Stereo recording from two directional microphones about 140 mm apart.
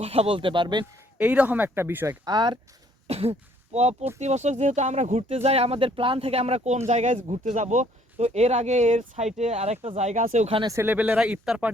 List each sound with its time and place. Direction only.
0.0 s speech: 45° right (ahead or behind)
1.2 s speech: 10° right (ahead or behind)
2.2 s speech: 30° right (ahead or behind)
3.1 s speech: 45° right (ahead or behind)
10.7 s speech: 15° right (ahead or behind)